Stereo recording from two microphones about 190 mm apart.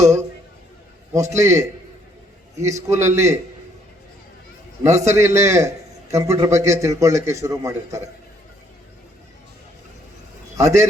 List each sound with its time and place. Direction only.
1.1 s a man's voice: 15° right (ahead or behind)
4.8 s a man's voice: 15° right (ahead or behind)
10.6 s a man's voice: 15° right (ahead or behind)